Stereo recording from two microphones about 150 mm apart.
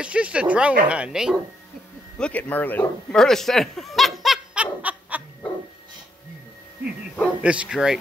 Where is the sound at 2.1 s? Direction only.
10° left (ahead or behind).